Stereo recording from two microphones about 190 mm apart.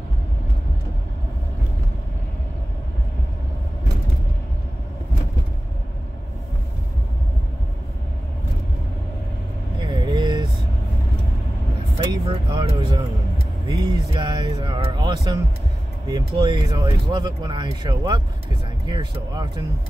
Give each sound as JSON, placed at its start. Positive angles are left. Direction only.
{"t": 9.8, "sound": "vehicle", "side_deg": -25}
{"t": 12.1, "sound": "speech", "side_deg": -25}